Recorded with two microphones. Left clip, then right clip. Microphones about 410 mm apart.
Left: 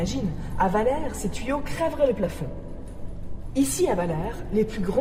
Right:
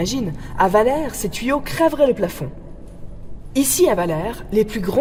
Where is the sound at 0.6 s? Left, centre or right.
Right.